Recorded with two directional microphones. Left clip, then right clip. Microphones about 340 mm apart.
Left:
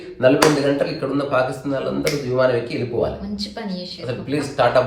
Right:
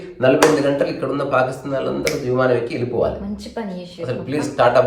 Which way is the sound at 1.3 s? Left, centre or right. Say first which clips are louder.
Right 2 dB; centre.